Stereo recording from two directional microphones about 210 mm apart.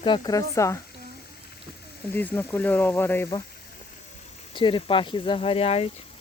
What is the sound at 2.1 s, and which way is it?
Speech, 10° left (ahead or behind).